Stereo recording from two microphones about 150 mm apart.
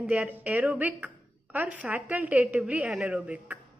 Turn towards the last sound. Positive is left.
turn(degrees=-10)  # may be behind; listen again after turning